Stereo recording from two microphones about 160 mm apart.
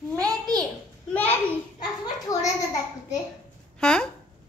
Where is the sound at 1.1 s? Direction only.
10° left (ahead or behind).